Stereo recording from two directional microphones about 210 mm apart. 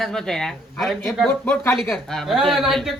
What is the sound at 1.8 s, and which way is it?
Speech, centre (ahead or behind).